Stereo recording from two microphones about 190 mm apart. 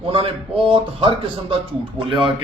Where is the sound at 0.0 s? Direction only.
30° right (ahead or behind).